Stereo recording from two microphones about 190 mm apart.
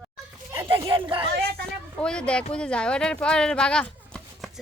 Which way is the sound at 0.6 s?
25° right (ahead or behind).